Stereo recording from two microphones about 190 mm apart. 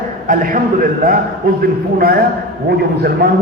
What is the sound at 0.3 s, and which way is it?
A man's voice, 45° right (ahead or behind).